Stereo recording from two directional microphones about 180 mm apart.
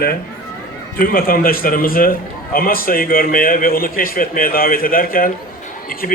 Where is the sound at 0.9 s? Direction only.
55° left (ahead or behind).